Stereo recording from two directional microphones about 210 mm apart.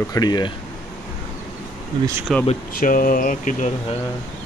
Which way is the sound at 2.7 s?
40° left (ahead or behind).